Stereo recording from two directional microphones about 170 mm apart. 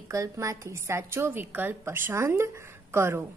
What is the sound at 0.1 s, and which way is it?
A woman's voice, 20° right (ahead or behind).